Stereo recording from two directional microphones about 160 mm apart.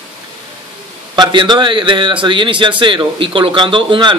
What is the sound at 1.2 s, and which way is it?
Speech, 30° right (ahead or behind).